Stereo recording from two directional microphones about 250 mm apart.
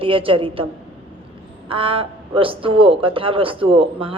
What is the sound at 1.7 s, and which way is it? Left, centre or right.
Speech, right.